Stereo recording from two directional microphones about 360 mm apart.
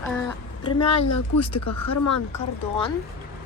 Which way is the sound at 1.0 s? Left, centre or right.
Left.